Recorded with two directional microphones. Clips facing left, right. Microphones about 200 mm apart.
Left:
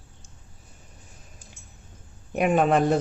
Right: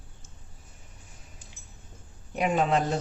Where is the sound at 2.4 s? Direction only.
55° left (ahead or behind).